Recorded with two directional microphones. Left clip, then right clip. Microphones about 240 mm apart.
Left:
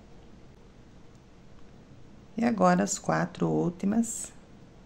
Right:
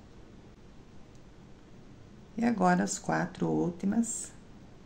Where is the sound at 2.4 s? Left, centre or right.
Left.